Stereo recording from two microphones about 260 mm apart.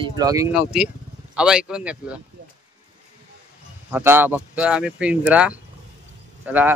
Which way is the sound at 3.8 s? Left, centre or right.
Centre.